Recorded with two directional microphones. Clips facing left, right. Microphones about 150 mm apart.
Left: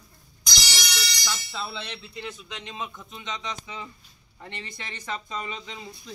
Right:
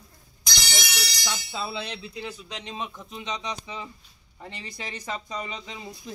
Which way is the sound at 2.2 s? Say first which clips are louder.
Right 1 dB; 35° right (ahead or behind).